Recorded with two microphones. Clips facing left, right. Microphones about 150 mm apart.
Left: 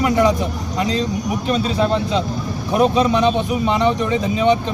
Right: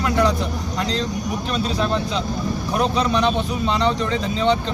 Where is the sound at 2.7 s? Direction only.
20° left (ahead or behind).